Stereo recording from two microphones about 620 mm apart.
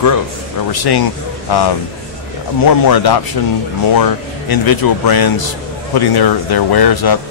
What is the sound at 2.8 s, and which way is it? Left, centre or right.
Speech, left.